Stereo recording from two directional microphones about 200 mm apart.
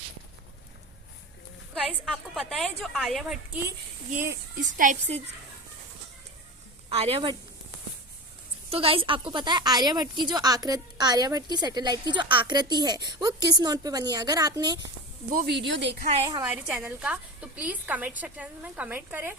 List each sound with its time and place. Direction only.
1.7 s a woman's voice: centre (ahead or behind)
4.1 s speech: 45° right (ahead or behind)
6.9 s a woman's voice: 30° right (ahead or behind)
8.7 s a woman's voice: 30° right (ahead or behind)
15.4 s speech: 60° right (ahead or behind)
16.3 s a woman's voice: 15° right (ahead or behind)
16.7 s a woman's voice: 5° right (ahead or behind)